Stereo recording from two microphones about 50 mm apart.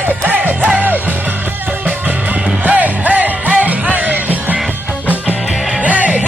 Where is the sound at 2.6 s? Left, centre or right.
Right.